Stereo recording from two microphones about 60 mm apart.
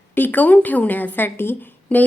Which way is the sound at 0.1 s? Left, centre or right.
Left.